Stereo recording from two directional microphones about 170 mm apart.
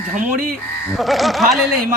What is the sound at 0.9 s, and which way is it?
Speech, centre (ahead or behind).